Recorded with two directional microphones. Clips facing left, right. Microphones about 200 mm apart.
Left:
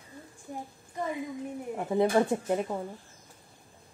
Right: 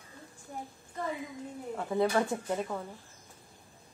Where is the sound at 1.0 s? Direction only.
15° left (ahead or behind).